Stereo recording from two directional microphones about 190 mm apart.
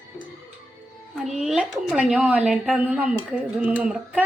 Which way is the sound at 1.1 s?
Centre (ahead or behind).